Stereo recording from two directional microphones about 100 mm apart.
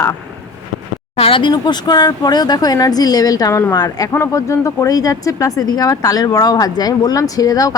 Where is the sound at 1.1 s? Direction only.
70° left (ahead or behind).